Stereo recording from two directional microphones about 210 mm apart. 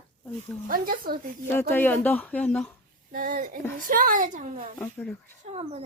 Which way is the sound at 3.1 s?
40° right (ahead or behind).